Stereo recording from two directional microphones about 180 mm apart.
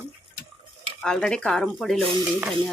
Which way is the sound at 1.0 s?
5° left (ahead or behind).